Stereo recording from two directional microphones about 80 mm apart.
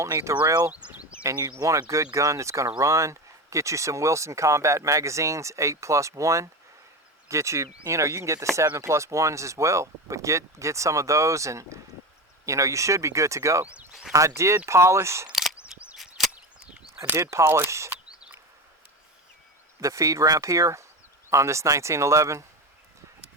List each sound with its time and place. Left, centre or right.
0.0 s speech: right
0.7 s speech: centre
1.2 s speech: right
15.3 s a sound: centre
15.5 s a sound: centre
16.0 s chop: centre
16.3 s a sound: centre
17.3 s speech: right
19.8 s speech: right